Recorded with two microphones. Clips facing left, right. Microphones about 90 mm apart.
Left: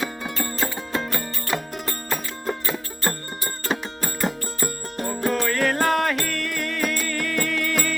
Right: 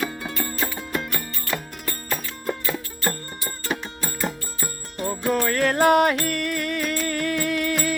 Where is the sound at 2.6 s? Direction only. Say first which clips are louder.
Even; 35° left (ahead or behind).